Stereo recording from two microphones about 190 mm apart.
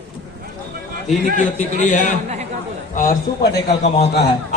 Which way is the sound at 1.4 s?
40° left (ahead or behind).